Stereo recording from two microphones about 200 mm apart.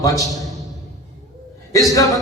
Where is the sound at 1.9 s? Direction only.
15° left (ahead or behind).